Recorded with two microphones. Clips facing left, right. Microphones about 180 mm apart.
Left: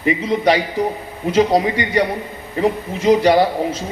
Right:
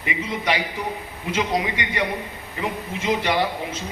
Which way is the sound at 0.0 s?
40° left (ahead or behind).